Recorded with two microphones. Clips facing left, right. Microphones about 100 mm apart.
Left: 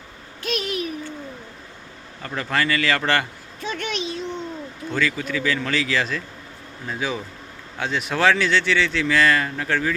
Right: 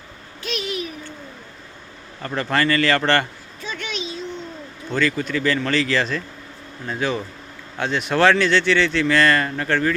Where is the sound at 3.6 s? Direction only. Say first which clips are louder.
Left 2 dB; 55° left (ahead or behind).